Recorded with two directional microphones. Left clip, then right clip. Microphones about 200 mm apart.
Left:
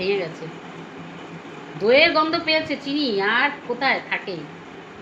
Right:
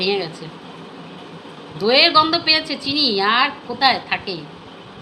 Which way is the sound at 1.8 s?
40° right (ahead or behind).